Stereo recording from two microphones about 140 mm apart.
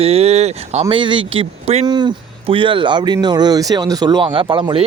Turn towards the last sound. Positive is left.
turn(degrees=-35)  # may be behind; listen again after turning